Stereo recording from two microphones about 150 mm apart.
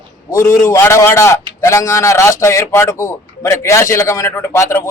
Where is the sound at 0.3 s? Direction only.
20° left (ahead or behind).